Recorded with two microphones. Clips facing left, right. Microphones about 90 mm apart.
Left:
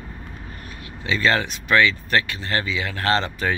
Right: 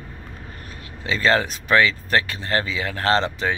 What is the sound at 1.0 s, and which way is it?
Speech, 35° right (ahead or behind).